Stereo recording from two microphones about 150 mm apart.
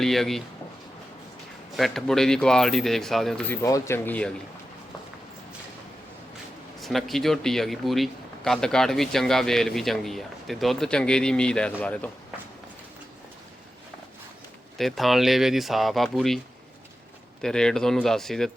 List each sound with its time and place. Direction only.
0.0 s a man's voice: centre (ahead or behind)
1.7 s a man's voice: centre (ahead or behind)
3.5 s speech: 20° left (ahead or behind)
6.7 s a man's voice: centre (ahead or behind)
14.8 s a man's voice: centre (ahead or behind)
17.4 s a man's voice: 5° left (ahead or behind)